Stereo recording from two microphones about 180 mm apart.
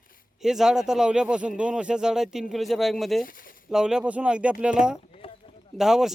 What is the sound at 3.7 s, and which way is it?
Speech, 5° right (ahead or behind).